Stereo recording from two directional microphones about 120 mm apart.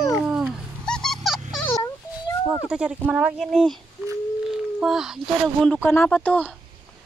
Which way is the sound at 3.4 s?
5° left (ahead or behind).